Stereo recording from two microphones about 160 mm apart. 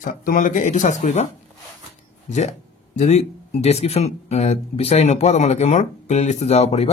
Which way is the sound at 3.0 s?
45° left (ahead or behind).